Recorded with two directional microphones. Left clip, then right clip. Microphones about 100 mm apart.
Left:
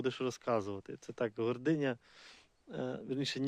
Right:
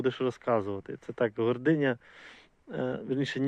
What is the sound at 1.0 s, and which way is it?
Speech, 15° left (ahead or behind).